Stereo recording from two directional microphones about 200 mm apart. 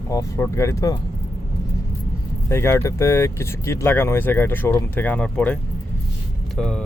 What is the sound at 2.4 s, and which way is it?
Speech, 15° left (ahead or behind).